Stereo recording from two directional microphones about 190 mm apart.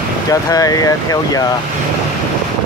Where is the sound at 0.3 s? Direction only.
20° left (ahead or behind).